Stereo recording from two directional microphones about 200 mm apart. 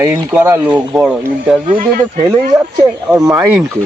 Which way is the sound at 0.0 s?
15° right (ahead or behind).